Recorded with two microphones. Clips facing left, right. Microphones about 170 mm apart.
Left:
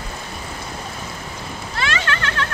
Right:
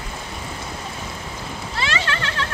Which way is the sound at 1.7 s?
30° right (ahead or behind).